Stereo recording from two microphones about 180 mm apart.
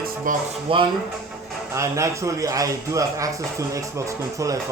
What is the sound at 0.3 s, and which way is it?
Speech, 50° right (ahead or behind).